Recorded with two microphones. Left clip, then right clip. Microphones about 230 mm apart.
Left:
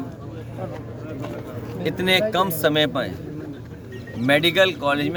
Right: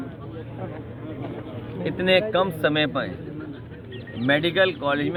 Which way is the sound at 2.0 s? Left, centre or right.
Left.